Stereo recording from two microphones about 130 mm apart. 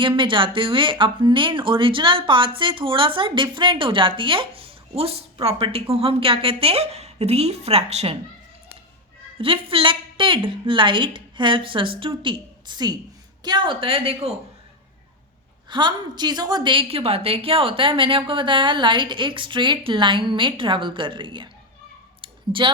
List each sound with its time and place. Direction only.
0.0 s speech: 40° right (ahead or behind)
9.4 s a woman's voice: 45° right (ahead or behind)
15.7 s a woman's voice: 35° right (ahead or behind)
22.2 s clicking: 40° right (ahead or behind)